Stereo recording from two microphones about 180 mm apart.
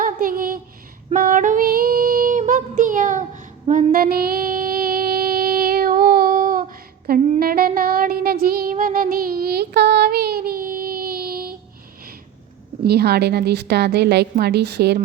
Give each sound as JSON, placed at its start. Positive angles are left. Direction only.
{"t": 0.0, "sound": "a sound", "side_deg": -50}
{"t": 1.1, "sound": "female singing", "side_deg": -50}
{"t": 2.4, "sound": "child singing", "side_deg": -45}
{"t": 12.8, "sound": "a woman's voice", "side_deg": -65}